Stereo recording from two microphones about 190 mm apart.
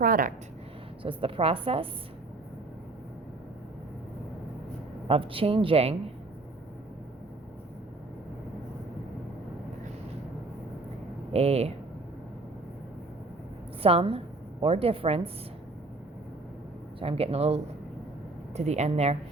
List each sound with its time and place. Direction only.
0.0 s speech: 45° right (ahead or behind)
1.0 s a woman's voice: 30° right (ahead or behind)
5.0 s speech: 30° right (ahead or behind)
11.3 s a woman's voice: 35° right (ahead or behind)
13.8 s a woman's voice: 30° right (ahead or behind)
17.0 s a woman's voice: 30° right (ahead or behind)